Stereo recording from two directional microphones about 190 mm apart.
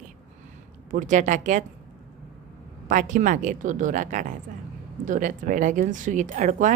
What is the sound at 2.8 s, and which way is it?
A woman's voice, 45° right (ahead or behind).